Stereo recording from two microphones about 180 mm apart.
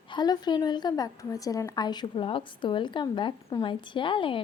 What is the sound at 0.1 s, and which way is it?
A woman's voice, 25° left (ahead or behind).